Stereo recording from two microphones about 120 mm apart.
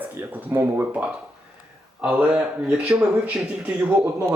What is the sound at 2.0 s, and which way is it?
Speech, 10° right (ahead or behind).